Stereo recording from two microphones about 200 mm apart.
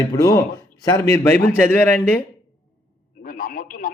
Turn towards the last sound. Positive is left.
turn(degrees=45)  # may be behind; listen again after turning